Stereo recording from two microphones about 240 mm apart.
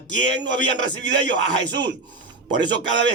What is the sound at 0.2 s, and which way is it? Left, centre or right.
Speech, right.